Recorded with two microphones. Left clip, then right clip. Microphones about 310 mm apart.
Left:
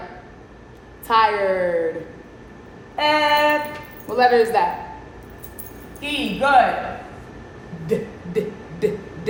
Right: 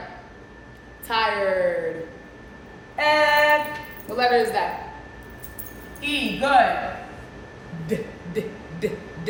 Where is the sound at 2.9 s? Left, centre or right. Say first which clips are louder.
Left 1 dB; centre.